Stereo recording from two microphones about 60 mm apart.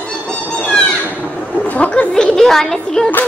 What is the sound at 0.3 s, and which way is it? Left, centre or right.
Music, centre.